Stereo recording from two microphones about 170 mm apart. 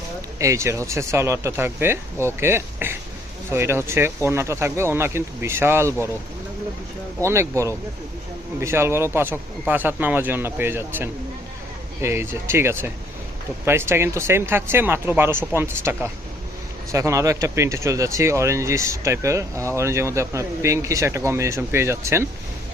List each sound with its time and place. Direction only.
0.3 s speech: 20° right (ahead or behind)
7.2 s speech: 15° right (ahead or behind)